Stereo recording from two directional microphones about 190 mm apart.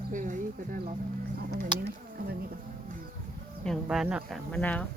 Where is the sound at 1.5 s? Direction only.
55° right (ahead or behind).